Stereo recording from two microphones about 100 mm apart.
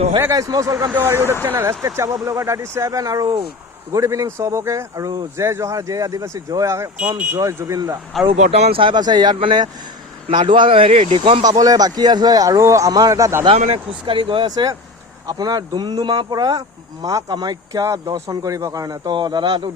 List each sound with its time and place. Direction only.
0.2 s speech: 30° right (ahead or behind)
8.1 s speech: 5° left (ahead or behind)
8.5 s speech: 90° right
8.8 s a man's voice: 50° right (ahead or behind)
10.2 s speech: 60° right (ahead or behind); by 11.2 s 85° right
11.2 s speech: 65° right (ahead or behind)
11.4 s speech: 40° right (ahead or behind)
13.4 s speech: 60° right (ahead or behind)
14.5 s a man's voice: 40° right (ahead or behind)